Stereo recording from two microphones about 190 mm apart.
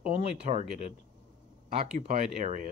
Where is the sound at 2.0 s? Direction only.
40° right (ahead or behind).